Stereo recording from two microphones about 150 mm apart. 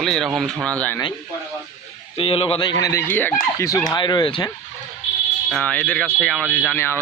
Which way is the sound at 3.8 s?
30° left (ahead or behind).